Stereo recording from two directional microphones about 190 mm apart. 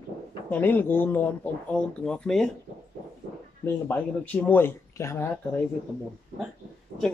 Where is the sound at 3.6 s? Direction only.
10° left (ahead or behind).